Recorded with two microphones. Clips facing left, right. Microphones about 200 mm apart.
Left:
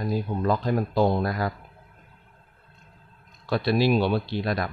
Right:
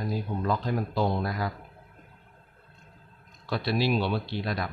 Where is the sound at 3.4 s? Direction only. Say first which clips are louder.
Left 5 dB; 50° left (ahead or behind).